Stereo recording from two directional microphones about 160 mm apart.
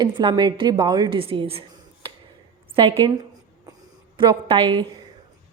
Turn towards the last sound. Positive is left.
turn(degrees=-35)  # may be behind; listen again after turning